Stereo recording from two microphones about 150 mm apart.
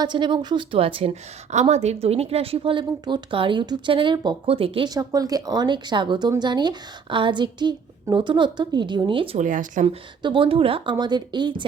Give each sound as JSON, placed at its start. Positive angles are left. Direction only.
{"t": 0.0, "sound": "a woman's voice", "side_deg": -30}
{"t": 4.9, "sound": "a woman's voice", "side_deg": -25}
{"t": 9.4, "sound": "speech", "side_deg": -60}
{"t": 9.8, "sound": "a woman's voice", "side_deg": -35}